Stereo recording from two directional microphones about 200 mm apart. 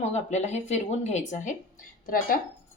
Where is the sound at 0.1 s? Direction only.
35° left (ahead or behind).